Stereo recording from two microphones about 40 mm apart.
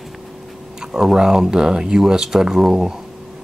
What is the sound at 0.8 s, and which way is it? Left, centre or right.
Speech, centre.